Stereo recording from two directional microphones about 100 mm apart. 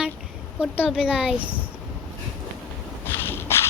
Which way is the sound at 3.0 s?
20° left (ahead or behind).